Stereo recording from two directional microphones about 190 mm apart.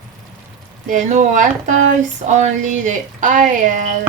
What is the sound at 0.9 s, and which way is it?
Speech, 40° right (ahead or behind).